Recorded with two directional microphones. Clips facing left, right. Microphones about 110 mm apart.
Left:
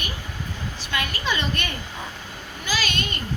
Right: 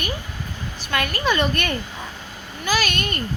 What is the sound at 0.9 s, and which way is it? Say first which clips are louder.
A woman's voice: right 5 dB; 55° right (ahead or behind).